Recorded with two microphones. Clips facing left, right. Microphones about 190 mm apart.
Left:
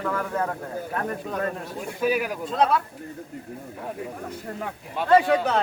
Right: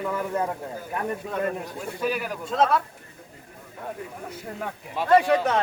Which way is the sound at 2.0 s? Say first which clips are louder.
Left 4 dB; 10° left (ahead or behind).